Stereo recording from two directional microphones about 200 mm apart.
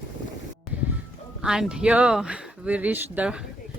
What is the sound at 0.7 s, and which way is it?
Music, 10° right (ahead or behind).